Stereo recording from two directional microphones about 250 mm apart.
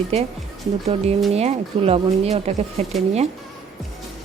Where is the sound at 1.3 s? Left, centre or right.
Right.